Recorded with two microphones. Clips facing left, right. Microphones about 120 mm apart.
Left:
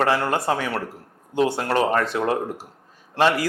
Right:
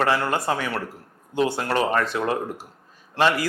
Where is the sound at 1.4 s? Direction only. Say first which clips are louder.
Left 2 dB; 55° left (ahead or behind).